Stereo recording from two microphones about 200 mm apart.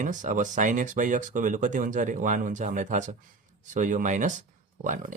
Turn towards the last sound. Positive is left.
turn(degrees=-40)  # may be behind; listen again after turning